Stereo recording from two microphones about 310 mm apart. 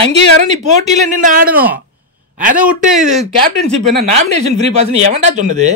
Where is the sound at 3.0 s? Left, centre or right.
Right.